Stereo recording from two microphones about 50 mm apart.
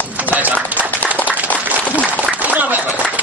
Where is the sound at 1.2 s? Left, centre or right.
Right.